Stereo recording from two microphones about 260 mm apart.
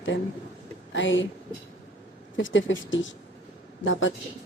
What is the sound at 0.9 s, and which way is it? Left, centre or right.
Speech, left.